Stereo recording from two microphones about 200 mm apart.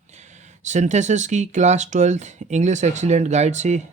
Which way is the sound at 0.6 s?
35° right (ahead or behind).